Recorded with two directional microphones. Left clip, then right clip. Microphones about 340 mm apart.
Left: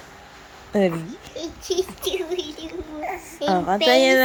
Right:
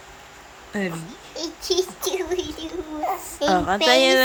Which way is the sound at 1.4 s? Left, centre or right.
Centre.